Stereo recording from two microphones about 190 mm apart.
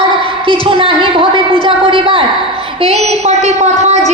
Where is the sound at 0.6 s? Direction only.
30° right (ahead or behind).